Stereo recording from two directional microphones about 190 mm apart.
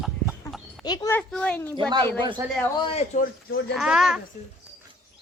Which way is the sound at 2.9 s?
40° left (ahead or behind).